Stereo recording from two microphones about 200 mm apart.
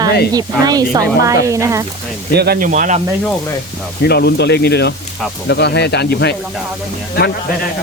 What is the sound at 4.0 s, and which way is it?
Speech, 55° left (ahead or behind).